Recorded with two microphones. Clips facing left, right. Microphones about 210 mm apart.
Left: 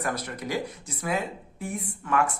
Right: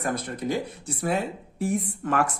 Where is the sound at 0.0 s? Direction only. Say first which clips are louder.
Right 2 dB; 50° right (ahead or behind).